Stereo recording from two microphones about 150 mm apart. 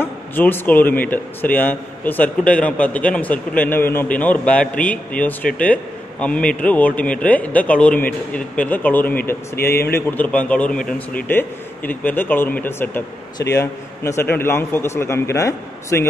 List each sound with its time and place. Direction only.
0.0 s a man's voice: 15° left (ahead or behind)